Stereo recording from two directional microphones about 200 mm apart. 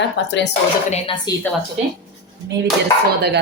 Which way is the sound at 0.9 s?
30° left (ahead or behind).